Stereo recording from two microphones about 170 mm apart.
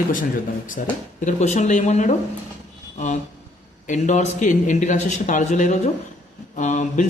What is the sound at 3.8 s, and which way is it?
A man's voice, 45° left (ahead or behind).